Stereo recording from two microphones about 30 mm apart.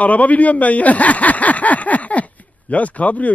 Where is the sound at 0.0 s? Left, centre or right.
Left.